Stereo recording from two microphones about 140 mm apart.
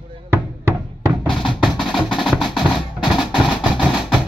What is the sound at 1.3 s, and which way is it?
Music, centre (ahead or behind).